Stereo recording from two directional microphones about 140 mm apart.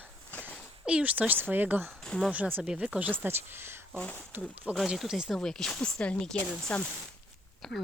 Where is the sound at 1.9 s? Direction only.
5° left (ahead or behind).